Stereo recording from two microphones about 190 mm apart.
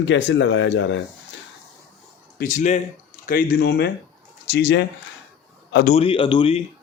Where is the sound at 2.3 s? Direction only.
45° left (ahead or behind); by 4.8 s 60° left (ahead or behind).